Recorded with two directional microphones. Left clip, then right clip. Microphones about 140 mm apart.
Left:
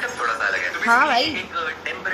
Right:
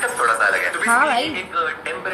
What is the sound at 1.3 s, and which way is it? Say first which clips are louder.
Speech: right 4 dB; 35° right (ahead or behind).